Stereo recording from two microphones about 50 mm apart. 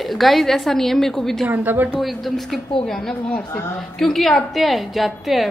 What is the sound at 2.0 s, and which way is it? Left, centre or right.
A woman's voice, centre.